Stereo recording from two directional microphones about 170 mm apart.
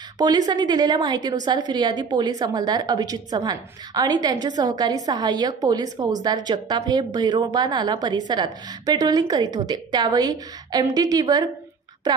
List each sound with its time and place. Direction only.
0.2 s a woman's voice: 25° right (ahead or behind)